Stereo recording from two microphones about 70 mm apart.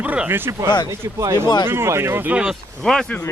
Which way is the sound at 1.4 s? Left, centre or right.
Left.